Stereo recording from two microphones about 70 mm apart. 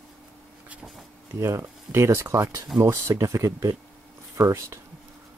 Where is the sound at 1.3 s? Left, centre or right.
Right.